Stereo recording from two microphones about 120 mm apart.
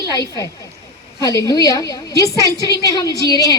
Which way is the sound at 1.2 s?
30° left (ahead or behind).